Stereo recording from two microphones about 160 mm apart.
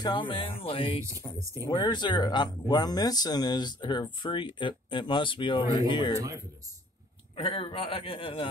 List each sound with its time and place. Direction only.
0.0 s a man's voice: 30° left (ahead or behind)
6.1 s speech: 20° right (ahead or behind)
7.3 s a man's voice: 35° left (ahead or behind)